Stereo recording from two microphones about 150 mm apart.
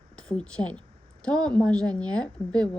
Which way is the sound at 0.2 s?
5° left (ahead or behind).